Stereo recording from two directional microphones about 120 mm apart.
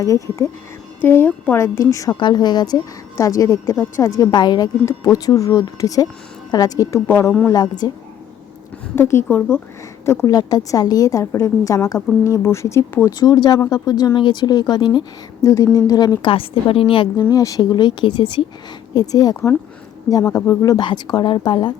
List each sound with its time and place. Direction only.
0.0 s a woman's voice: 25° left (ahead or behind)
2.1 s a woman's voice: 40° left (ahead or behind); by 7.5 s 15° left (ahead or behind)
7.5 s speech: 35° left (ahead or behind)
9.0 s a woman's voice: 20° left (ahead or behind)
13.1 s speech: 35° left (ahead or behind)
15.4 s a woman's voice: 25° left (ahead or behind)
16.3 s a woman's voice: 50° left (ahead or behind)
17.3 s speech: 30° left (ahead or behind)